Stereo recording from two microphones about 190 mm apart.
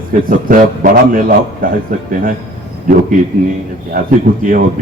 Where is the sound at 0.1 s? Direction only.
50° right (ahead or behind).